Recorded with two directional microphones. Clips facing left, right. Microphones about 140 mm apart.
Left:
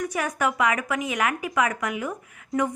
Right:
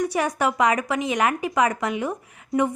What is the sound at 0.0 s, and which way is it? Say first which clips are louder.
A woman's voice: right 3 dB; 35° right (ahead or behind).